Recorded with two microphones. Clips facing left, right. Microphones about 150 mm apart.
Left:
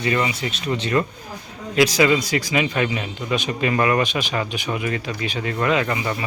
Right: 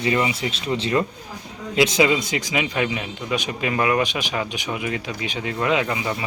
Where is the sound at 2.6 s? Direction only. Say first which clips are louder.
Left 1 dB; 10° right (ahead or behind).